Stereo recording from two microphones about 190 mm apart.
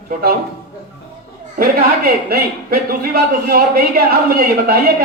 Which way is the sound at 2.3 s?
50° right (ahead or behind).